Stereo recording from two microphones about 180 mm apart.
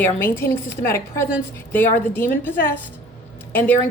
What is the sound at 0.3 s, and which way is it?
A woman's voice, 15° left (ahead or behind).